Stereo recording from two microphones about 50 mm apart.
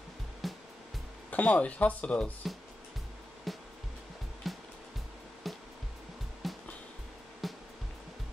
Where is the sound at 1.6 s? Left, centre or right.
Left.